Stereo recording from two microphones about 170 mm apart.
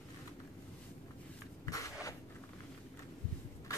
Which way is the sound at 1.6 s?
20° left (ahead or behind).